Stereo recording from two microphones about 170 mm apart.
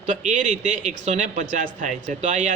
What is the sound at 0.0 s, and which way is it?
A man's voice, 45° right (ahead or behind).